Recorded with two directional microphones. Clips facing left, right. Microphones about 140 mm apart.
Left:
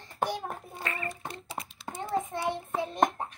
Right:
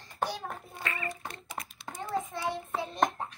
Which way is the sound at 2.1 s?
20° left (ahead or behind).